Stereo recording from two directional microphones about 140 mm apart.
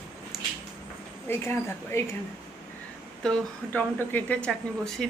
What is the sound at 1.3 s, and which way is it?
Speech, 15° left (ahead or behind).